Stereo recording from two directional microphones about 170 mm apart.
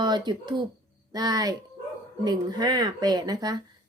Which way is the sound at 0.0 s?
25° right (ahead or behind).